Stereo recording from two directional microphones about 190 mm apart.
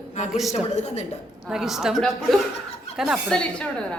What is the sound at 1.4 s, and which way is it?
A woman's voice, 5° right (ahead or behind).